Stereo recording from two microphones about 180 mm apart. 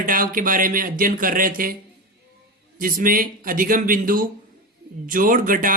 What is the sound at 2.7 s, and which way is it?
Speech, 50° right (ahead or behind).